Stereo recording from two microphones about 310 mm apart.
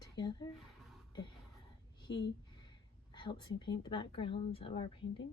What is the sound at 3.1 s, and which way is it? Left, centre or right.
A woman's voice, centre.